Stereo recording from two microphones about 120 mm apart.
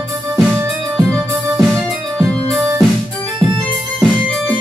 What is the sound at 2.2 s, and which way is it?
Keyboard, 5° left (ahead or behind).